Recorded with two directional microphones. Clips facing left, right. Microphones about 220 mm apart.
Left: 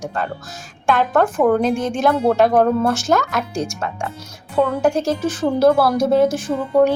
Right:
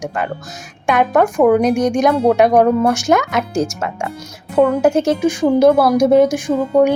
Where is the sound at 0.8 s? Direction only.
15° right (ahead or behind).